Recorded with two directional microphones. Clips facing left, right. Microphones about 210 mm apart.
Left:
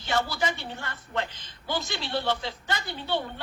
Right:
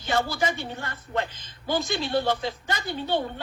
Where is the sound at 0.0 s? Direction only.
45° right (ahead or behind).